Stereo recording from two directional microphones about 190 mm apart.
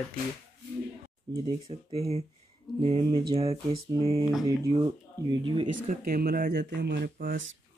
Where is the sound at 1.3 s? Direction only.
30° right (ahead or behind).